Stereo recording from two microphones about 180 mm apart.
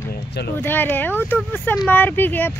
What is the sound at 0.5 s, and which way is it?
Speech, 10° left (ahead or behind).